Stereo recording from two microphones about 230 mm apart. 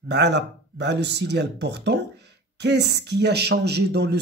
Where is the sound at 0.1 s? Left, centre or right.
Right.